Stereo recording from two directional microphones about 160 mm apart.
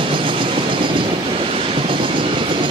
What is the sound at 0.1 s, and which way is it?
Train, 30° right (ahead or behind).